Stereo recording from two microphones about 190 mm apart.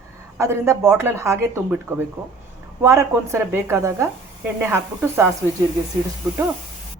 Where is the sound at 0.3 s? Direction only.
15° right (ahead or behind).